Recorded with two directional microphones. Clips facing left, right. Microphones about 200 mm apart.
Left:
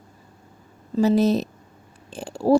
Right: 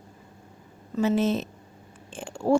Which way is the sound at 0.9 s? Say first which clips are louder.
Left 5 dB; 35° left (ahead or behind).